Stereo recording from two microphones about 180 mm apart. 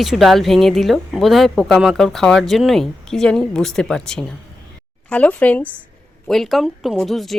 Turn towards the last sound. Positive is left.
turn(degrees=0)  # may be behind; listen again after turning